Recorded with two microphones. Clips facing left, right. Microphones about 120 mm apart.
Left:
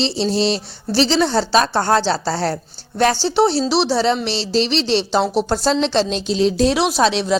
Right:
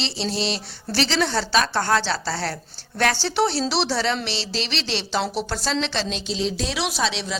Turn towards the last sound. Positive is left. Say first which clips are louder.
# left 9 dB
turn(degrees=45)  # may be behind; listen again after turning